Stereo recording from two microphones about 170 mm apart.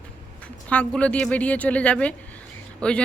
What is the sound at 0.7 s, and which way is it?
A woman's voice, 5° left (ahead or behind).